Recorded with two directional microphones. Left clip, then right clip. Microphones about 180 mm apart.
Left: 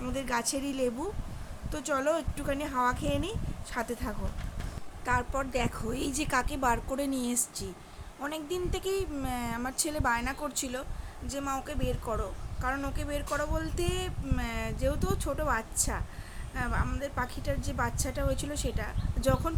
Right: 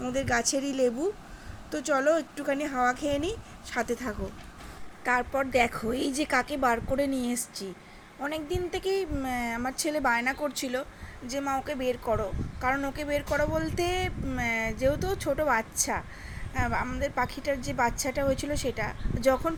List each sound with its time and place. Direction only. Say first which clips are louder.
0.0 s a woman's voice: right 5 dB; 10° right (ahead or behind)